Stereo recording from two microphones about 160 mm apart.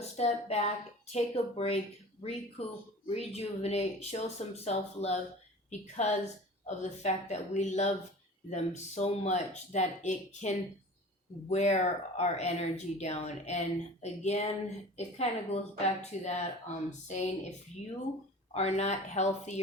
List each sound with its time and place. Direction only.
0.2 s speech: 40° left (ahead or behind)
3.1 s speech: 40° left (ahead or behind)
18.5 s speech: 45° left (ahead or behind)